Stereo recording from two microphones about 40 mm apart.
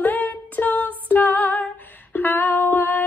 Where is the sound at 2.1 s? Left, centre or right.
Left.